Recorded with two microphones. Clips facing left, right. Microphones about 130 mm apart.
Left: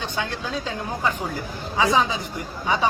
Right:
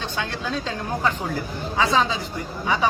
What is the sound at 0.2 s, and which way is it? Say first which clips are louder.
Speech: right 1 dB; 15° left (ahead or behind).